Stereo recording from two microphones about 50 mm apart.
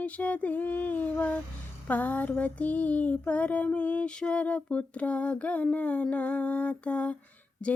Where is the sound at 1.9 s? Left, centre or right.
Left.